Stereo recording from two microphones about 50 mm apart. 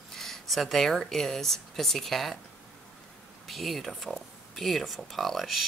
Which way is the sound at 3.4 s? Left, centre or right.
Centre.